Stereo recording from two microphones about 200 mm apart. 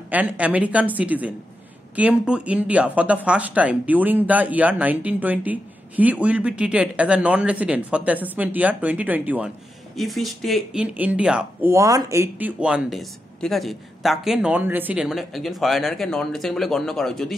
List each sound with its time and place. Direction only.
0.1 s speech: 5° right (ahead or behind)